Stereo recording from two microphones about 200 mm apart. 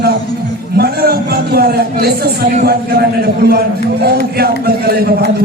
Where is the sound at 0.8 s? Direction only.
50° right (ahead or behind).